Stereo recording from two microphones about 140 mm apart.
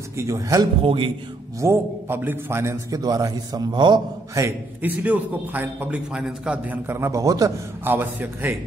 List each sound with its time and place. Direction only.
0.2 s a man's voice: 25° right (ahead or behind)
0.8 s speech: 40° right (ahead or behind)
1.6 s a man's voice: 20° right (ahead or behind)
4.4 s a man's voice: 10° right (ahead or behind)
7.9 s a man's voice: 15° right (ahead or behind)